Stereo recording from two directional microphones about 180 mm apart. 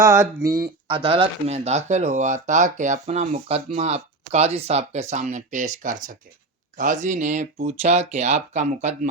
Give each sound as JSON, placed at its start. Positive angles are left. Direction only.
{"t": 0.0, "sound": "speech", "side_deg": -15}